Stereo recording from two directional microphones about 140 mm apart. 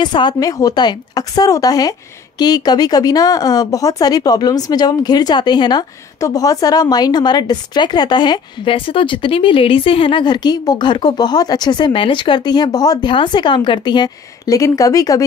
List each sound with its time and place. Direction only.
0.0 s a woman's voice: 30° left (ahead or behind)